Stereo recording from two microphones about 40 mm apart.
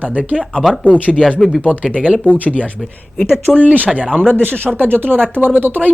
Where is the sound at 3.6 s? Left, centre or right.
Right.